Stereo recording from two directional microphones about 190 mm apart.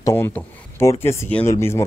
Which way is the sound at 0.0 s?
10° left (ahead or behind).